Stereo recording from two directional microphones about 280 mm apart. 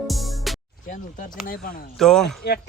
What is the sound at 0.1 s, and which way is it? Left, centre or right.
Music, centre.